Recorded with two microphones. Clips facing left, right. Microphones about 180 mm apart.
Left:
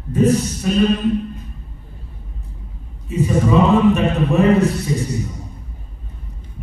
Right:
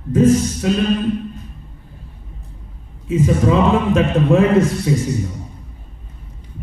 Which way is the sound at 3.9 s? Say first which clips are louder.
Right 2 dB; 90° right.